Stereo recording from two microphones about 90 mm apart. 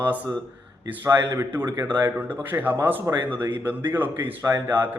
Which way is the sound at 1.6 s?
45° right (ahead or behind).